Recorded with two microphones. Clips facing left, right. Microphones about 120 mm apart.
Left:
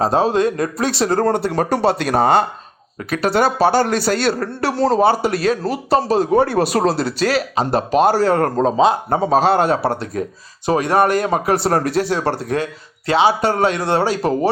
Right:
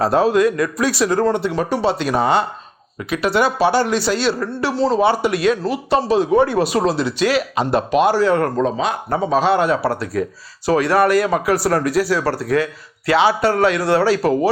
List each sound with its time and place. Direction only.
0.0 s speech: 25° left (ahead or behind)